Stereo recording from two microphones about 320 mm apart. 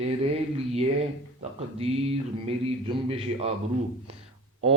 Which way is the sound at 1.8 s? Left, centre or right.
Centre.